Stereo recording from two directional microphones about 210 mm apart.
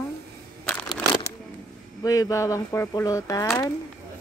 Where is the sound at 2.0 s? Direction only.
15° left (ahead or behind).